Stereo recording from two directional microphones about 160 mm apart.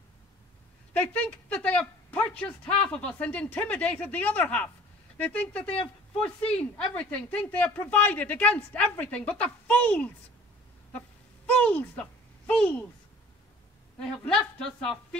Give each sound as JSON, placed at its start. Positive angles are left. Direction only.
{"t": 1.0, "sound": "a woman's voice", "side_deg": 5}
{"t": 11.4, "sound": "a sound", "side_deg": 10}
{"t": 13.9, "sound": "a woman's voice", "side_deg": 5}